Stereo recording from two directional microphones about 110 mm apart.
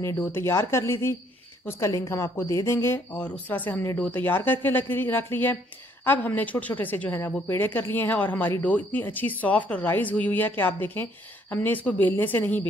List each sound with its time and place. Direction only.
0.2 s speech: 20° left (ahead or behind)